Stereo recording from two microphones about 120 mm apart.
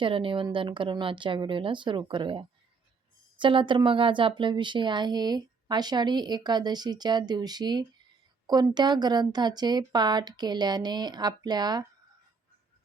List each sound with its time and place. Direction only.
0.0 s a woman's voice: 45° right (ahead or behind)